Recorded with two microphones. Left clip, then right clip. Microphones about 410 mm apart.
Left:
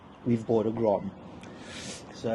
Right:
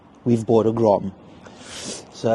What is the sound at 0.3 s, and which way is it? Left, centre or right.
Speech, right.